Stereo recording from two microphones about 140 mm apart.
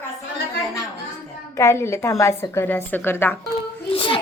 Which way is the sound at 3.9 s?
40° left (ahead or behind).